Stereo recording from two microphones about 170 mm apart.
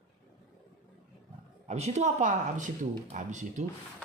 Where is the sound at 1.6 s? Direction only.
40° right (ahead or behind).